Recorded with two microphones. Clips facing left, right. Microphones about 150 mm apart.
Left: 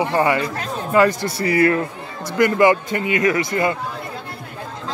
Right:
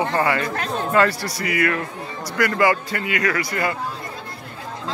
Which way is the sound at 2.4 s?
20° left (ahead or behind).